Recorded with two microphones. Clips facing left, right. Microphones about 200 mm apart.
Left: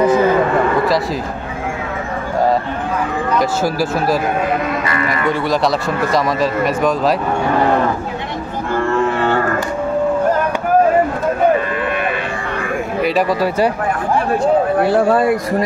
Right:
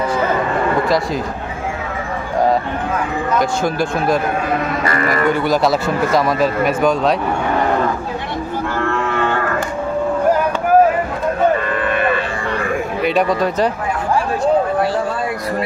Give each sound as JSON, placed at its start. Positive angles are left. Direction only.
{"t": 3.3, "sound": "a man's voice", "side_deg": 5}
{"t": 4.9, "sound": "speech", "side_deg": -40}
{"t": 5.3, "sound": "a man's voice", "side_deg": 0}
{"t": 13.0, "sound": "a man's voice", "side_deg": 0}
{"t": 14.9, "sound": "speech", "side_deg": 60}